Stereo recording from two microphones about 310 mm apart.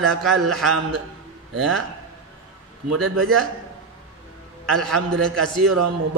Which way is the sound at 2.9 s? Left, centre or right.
Right.